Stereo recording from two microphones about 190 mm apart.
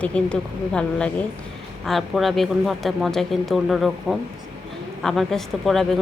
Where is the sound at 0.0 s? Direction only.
5° left (ahead or behind).